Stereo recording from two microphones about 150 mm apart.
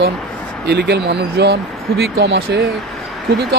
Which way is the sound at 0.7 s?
90° right.